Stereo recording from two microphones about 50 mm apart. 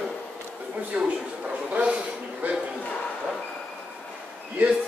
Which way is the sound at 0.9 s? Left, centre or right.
Right.